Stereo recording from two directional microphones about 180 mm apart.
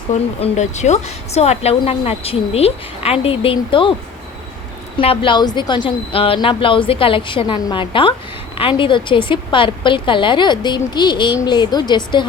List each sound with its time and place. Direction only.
0.1 s a woman's voice: 35° left (ahead or behind)
4.9 s a woman's voice: 30° left (ahead or behind)